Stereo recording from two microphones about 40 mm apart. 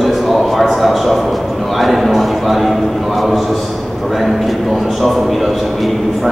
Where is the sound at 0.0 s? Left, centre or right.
Centre.